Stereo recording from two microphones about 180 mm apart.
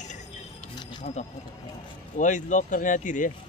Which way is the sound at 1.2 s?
40° left (ahead or behind).